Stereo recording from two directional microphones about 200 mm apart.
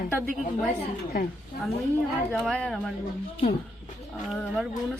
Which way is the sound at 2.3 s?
5° left (ahead or behind).